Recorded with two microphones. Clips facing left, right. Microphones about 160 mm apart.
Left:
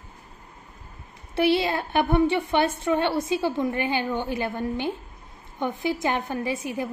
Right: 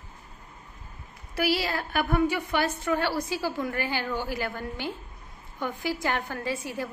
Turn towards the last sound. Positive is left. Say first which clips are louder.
# left 4 dB
turn(degrees=20)  # may be behind; listen again after turning